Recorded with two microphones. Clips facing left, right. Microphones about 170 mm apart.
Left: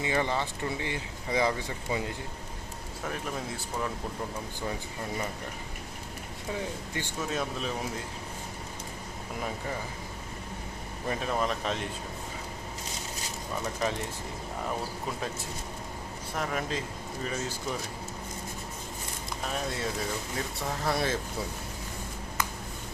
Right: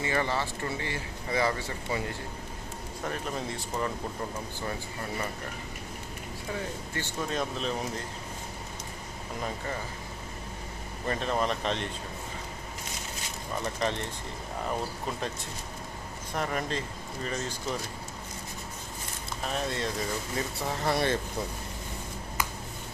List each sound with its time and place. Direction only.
0.0 s speech: 15° left (ahead or behind)
3.1 s speech: centre (ahead or behind)
6.9 s speech: 10° left (ahead or behind)
11.1 s speech: 5° left (ahead or behind)
13.7 s speech: 5° left (ahead or behind)
16.3 s speech: centre (ahead or behind)
19.5 s speech: 5° left (ahead or behind)